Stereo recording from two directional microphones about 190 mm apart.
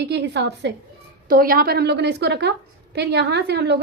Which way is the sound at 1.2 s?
50° right (ahead or behind).